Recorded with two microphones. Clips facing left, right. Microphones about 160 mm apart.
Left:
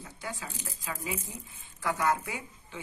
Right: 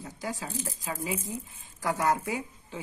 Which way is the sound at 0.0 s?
35° right (ahead or behind).